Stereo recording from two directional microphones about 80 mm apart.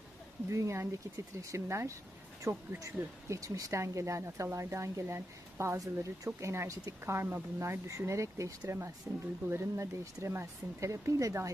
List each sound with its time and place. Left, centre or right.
0.5 s speech: right
5.7 s speech: right